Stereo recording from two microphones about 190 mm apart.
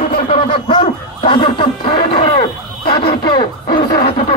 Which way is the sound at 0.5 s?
25° left (ahead or behind).